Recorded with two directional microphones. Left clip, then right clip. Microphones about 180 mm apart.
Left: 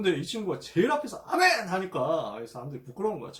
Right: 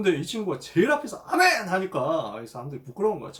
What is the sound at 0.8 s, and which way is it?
Speech, 15° right (ahead or behind).